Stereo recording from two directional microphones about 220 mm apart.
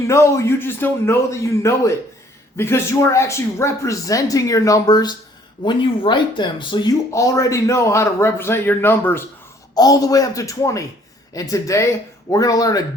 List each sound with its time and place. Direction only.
0.1 s speech: 15° left (ahead or behind)